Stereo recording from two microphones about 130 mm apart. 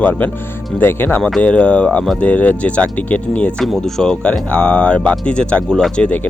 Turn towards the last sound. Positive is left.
turn(degrees=10)  # may be behind; listen again after turning